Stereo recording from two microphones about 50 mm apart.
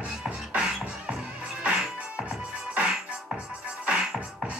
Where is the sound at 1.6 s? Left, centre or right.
Right.